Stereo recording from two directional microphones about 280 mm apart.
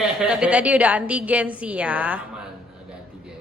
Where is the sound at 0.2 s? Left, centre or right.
Centre.